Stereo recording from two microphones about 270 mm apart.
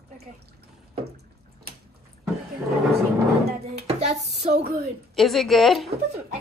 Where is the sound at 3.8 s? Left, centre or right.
Right.